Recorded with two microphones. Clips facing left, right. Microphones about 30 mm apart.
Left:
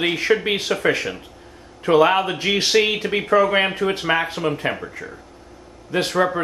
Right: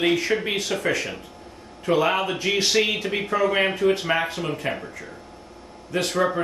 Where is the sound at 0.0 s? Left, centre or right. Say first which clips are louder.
Left 2 dB; left.